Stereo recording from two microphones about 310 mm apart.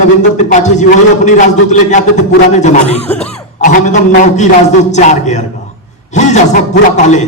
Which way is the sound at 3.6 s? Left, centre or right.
Left.